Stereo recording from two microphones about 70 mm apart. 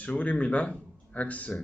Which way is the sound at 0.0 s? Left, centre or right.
Centre.